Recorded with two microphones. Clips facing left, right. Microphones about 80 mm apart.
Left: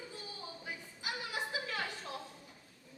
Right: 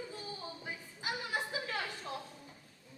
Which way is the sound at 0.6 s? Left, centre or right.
Right.